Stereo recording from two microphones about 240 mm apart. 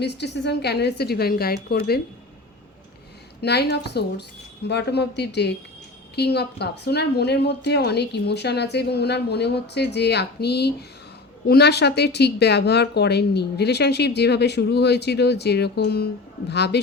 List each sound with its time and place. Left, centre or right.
0.0 s a woman's voice: left
3.4 s a woman's voice: left